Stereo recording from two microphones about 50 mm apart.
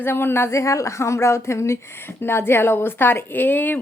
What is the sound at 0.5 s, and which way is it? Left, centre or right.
Speech, left.